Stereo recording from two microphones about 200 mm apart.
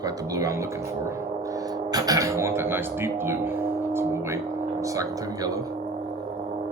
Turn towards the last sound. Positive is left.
turn(degrees=-20)  # may be behind; listen again after turning